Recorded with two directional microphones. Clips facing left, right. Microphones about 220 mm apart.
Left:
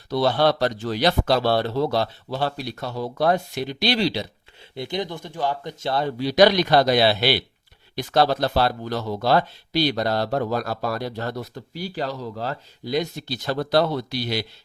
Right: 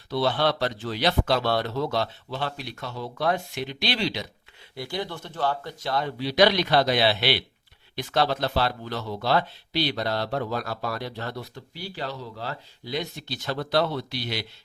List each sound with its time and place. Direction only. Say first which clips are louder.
0.1 s speech: left 4 dB; 40° left (ahead or behind)
4.7 s speech: left 4 dB; 20° left (ahead or behind)
5.8 s speech: left 4 dB; 30° left (ahead or behind)